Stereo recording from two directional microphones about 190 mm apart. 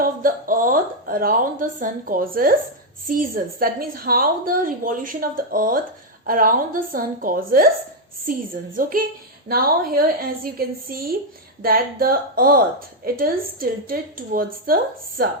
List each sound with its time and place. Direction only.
0.0 s a woman's voice: 45° right (ahead or behind)